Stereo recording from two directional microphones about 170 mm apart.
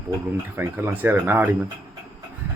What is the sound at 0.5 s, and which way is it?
Speech, 15° right (ahead or behind).